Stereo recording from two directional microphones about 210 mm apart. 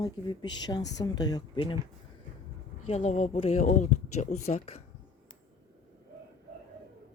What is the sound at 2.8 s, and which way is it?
Speech, 30° left (ahead or behind).